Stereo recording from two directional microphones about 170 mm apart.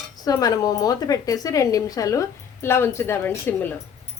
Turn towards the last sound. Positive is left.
turn(degrees=10)  # may be behind; listen again after turning